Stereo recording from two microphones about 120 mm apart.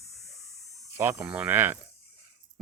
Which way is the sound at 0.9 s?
15° right (ahead or behind).